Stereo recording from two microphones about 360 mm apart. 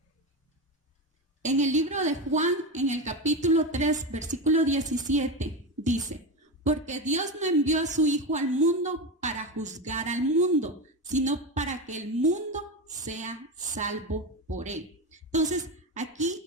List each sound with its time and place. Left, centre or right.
1.4 s a woman's voice: centre